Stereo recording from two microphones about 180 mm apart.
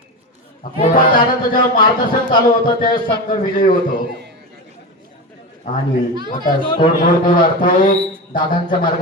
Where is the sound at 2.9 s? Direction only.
50° left (ahead or behind).